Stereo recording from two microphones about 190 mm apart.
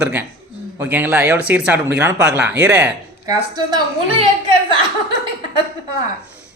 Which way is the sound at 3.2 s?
20° right (ahead or behind).